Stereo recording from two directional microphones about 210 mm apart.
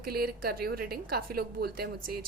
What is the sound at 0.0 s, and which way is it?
A woman's voice, 45° right (ahead or behind).